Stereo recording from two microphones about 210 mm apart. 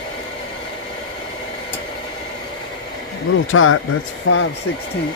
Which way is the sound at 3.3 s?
75° left (ahead or behind).